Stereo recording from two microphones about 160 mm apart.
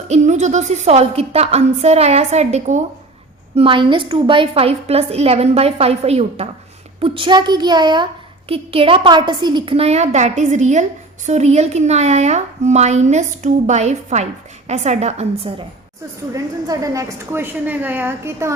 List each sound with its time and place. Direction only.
0.1 s a woman's voice: 45° right (ahead or behind)
3.5 s a child's voice: 35° right (ahead or behind)
16.3 s a woman's voice: 20° right (ahead or behind)